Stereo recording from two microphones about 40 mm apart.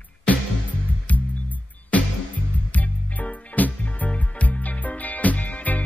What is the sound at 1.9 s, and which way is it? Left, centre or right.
Music, left.